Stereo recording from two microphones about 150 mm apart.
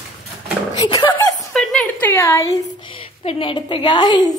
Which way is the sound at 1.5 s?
5° left (ahead or behind).